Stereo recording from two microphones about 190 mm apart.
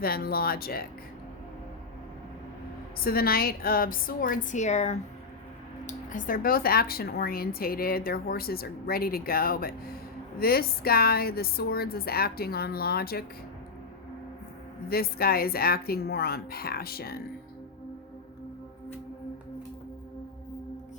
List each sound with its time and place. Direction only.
0.0 s speech: 55° left (ahead or behind)
3.0 s speech: 50° left (ahead or behind)
14.8 s speech: 55° left (ahead or behind)